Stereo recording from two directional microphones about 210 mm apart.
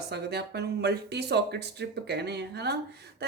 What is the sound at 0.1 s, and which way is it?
A woman's voice, 50° right (ahead or behind).